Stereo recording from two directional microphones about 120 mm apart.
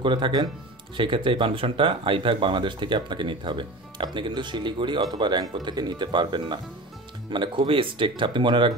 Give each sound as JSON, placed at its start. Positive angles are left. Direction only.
{"t": 0.0, "sound": "speech", "side_deg": -40}